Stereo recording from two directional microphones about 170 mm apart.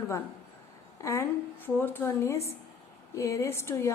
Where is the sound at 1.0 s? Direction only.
15° left (ahead or behind).